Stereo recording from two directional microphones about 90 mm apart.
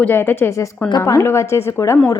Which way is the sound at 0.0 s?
25° left (ahead or behind).